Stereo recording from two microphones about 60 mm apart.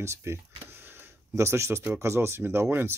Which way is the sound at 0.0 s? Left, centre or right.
Right.